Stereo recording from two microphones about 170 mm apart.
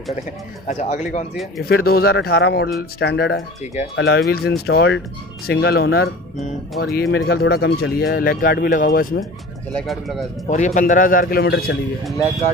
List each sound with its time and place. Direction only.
0.7 s speech: 45° left (ahead or behind)
1.6 s speech: 65° left (ahead or behind)
3.0 s speech: 85° left
5.5 s speech: 70° left (ahead or behind)
9.8 s speech: centre (ahead or behind)
10.5 s speech: 50° left (ahead or behind); by 11.7 s 70° left (ahead or behind)